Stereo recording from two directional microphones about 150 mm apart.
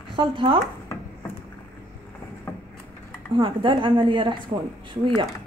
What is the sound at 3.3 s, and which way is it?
A woman's voice, 35° right (ahead or behind).